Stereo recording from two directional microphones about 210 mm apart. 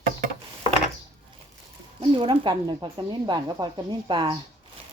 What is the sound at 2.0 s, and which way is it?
Speech, 25° right (ahead or behind).